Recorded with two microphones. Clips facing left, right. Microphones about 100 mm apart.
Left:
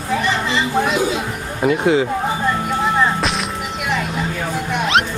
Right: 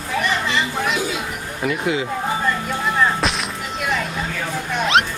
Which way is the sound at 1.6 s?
30° left (ahead or behind).